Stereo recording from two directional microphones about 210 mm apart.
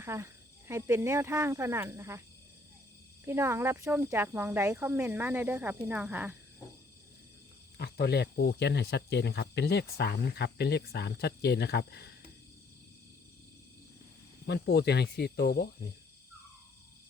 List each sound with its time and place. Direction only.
0.0 s speech: 10° right (ahead or behind)
3.2 s speech: 10° right (ahead or behind)
7.8 s speech: 50° left (ahead or behind)
14.4 s speech: 55° left (ahead or behind)